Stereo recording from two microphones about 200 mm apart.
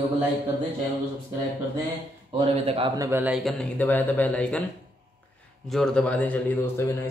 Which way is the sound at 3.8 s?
10° left (ahead or behind).